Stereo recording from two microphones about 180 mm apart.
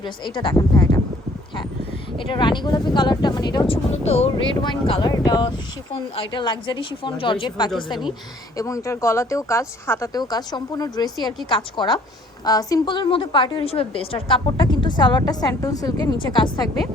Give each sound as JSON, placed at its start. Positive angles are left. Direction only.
{"t": 0.0, "sound": "a woman's voice", "side_deg": 25}
{"t": 2.1, "sound": "a woman's voice", "side_deg": 25}